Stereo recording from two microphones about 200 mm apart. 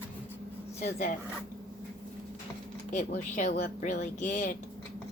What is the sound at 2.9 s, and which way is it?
A woman's voice, 35° left (ahead or behind).